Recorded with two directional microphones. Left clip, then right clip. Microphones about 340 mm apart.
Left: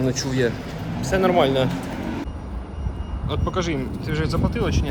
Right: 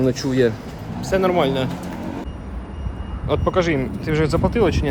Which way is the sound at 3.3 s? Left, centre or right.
Centre.